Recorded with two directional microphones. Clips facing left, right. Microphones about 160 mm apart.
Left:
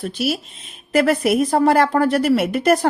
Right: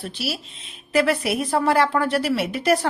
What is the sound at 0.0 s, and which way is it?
Speech, 50° left (ahead or behind).